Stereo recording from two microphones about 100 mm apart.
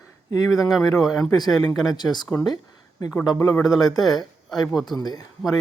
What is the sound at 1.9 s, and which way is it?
Speech, 45° left (ahead or behind).